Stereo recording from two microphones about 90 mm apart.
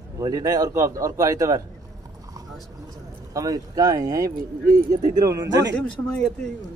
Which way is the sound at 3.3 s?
45° right (ahead or behind).